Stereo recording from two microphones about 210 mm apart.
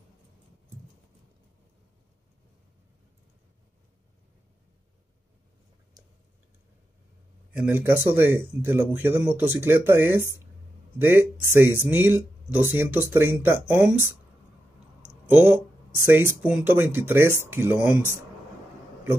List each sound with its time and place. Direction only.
6.0 s tick: 20° right (ahead or behind)
7.5 s speech: 10° right (ahead or behind)
15.2 s speech: 10° right (ahead or behind)